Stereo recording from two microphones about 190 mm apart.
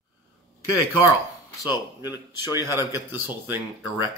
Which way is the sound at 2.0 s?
15° right (ahead or behind).